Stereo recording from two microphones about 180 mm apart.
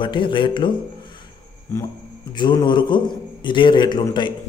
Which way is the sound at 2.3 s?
25° left (ahead or behind).